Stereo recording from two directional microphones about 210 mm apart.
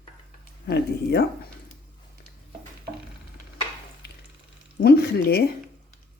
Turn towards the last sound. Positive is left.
turn(degrees=50)  # may be behind; listen again after turning